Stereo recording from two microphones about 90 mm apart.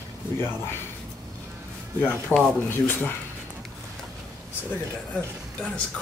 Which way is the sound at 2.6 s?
20° left (ahead or behind).